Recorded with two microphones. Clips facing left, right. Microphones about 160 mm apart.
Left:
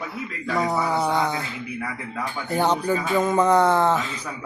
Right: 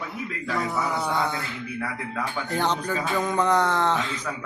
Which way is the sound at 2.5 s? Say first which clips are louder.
Left 5 dB; 10° left (ahead or behind).